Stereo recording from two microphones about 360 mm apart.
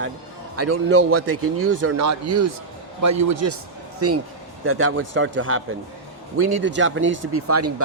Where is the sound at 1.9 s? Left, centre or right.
Right.